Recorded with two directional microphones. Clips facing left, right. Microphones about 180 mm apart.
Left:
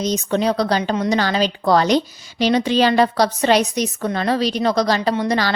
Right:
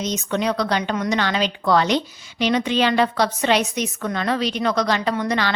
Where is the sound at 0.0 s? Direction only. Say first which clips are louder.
Left 4 dB; 35° left (ahead or behind).